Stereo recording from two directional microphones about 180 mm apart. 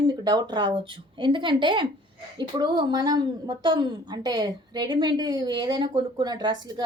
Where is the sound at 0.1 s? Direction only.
25° right (ahead or behind).